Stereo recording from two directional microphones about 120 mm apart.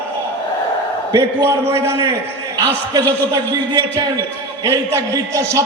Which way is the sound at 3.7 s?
40° right (ahead or behind).